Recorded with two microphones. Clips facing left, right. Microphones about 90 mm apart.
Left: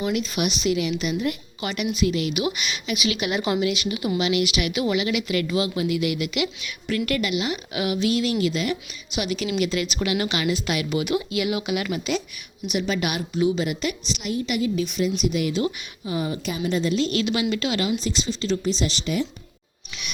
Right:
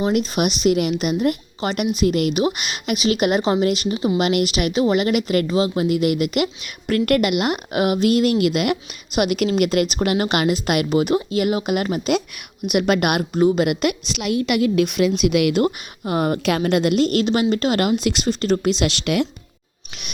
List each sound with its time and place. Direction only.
0.3 s a woman's voice: 45° right (ahead or behind)
2.3 s a woman's voice: 40° right (ahead or behind)
4.2 s a woman's voice: 45° right (ahead or behind)
12.6 s speech: 55° right (ahead or behind)
13.7 s a woman's voice: 70° right (ahead or behind)
15.6 s speech: 55° right (ahead or behind); by 19.3 s 75° right (ahead or behind)